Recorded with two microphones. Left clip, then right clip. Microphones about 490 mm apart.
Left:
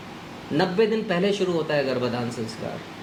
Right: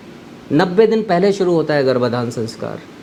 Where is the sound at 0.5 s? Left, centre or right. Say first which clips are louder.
Right 9 dB; right.